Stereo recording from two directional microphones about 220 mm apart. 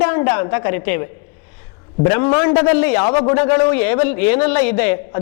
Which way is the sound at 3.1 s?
25° left (ahead or behind).